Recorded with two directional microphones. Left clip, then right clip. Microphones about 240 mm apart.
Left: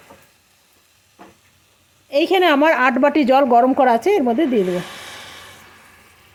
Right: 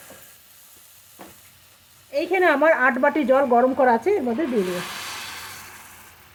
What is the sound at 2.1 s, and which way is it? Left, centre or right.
A woman's voice, left.